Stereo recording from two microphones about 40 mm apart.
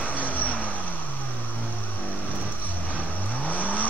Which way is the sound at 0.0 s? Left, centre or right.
Left.